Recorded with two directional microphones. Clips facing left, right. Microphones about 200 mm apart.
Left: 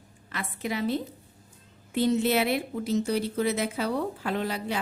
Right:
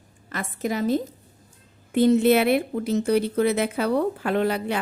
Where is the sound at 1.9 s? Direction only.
55° right (ahead or behind).